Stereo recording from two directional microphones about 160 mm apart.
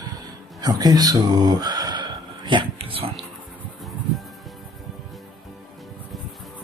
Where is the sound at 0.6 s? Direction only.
25° right (ahead or behind).